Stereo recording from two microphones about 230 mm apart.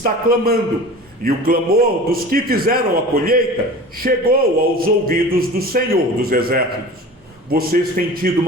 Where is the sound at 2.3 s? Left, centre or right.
Right.